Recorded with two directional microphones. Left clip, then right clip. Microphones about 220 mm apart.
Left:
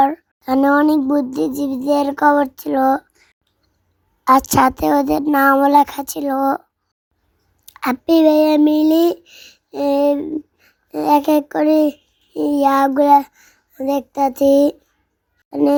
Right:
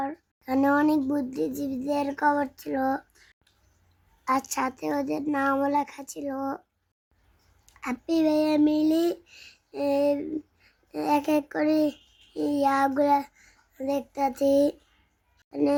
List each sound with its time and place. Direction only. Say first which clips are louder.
0.0 s a sound: left 17 dB; 40° left (ahead or behind)
0.5 s child singing: left 9 dB; 25° left (ahead or behind)
4.2 s speech: left 14 dB; 35° left (ahead or behind)
7.6 s a child's voice: left 13 dB; 35° left (ahead or behind)